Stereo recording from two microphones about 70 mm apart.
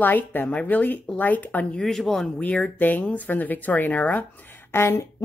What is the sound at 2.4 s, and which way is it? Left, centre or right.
Speech, left.